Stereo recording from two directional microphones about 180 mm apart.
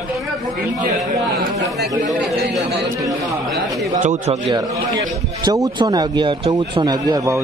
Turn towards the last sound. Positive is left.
turn(degrees=-20)  # may be behind; listen again after turning